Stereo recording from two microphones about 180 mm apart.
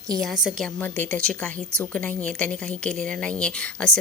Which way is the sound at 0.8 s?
10° left (ahead or behind).